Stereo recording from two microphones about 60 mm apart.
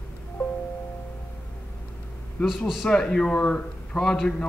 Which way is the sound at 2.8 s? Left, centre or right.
Centre.